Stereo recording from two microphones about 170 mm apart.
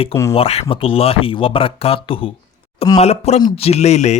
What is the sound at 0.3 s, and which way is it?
Speech, 35° left (ahead or behind).